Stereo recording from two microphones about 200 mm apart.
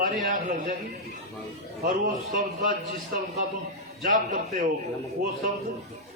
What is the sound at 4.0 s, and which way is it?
Speech, 40° right (ahead or behind).